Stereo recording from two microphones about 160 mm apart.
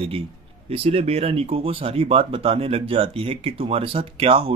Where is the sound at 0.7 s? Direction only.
40° right (ahead or behind).